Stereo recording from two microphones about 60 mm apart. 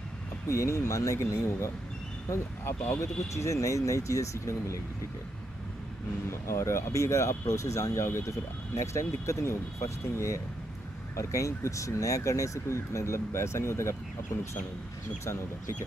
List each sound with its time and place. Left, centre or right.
0.5 s speech: left
6.4 s speech: left